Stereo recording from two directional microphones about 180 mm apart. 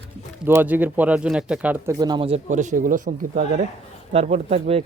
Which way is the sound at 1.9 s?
20° right (ahead or behind).